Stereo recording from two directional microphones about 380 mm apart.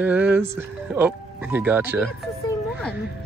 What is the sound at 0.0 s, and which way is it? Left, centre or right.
Speech, centre.